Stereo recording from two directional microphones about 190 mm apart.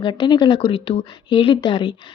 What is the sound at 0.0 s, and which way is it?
Speech, 25° left (ahead or behind).